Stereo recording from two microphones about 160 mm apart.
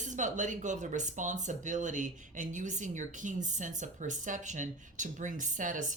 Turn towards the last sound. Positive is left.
turn(degrees=-55)  # may be behind; listen again after turning